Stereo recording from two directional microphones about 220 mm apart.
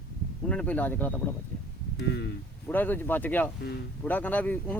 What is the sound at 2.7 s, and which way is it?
Speech, 10° left (ahead or behind).